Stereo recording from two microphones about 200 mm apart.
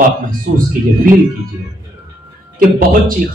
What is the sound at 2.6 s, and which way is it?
Speech, 45° right (ahead or behind).